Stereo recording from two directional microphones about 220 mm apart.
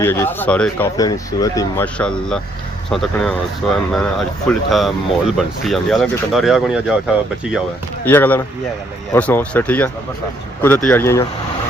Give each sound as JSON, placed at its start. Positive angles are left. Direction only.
{"t": 0.0, "sound": "speech", "side_deg": 10}
{"t": 8.0, "sound": "speech", "side_deg": 10}